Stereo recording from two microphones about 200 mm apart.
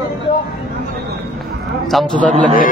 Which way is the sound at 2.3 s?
45° left (ahead or behind).